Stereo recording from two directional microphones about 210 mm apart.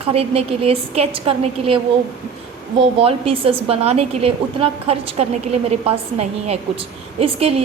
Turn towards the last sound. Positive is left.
turn(degrees=-30)  # may be behind; listen again after turning